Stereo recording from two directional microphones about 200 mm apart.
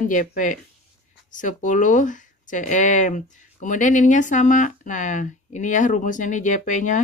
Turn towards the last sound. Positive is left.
turn(degrees=40)  # may be behind; listen again after turning